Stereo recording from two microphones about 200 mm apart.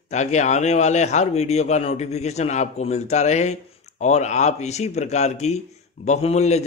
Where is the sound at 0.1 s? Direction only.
35° left (ahead or behind).